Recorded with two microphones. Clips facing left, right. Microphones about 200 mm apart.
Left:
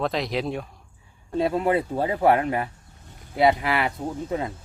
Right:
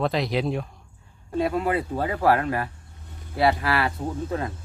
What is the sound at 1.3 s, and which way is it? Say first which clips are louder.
Speech: left 2 dB; 25° left (ahead or behind).